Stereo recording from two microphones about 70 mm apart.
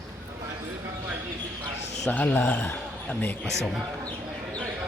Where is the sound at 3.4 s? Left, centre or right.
Centre.